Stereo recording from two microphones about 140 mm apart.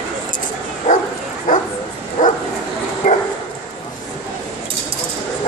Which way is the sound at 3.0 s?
65° left (ahead or behind).